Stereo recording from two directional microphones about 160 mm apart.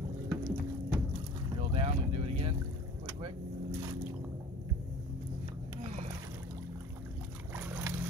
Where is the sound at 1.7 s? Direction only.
35° right (ahead or behind).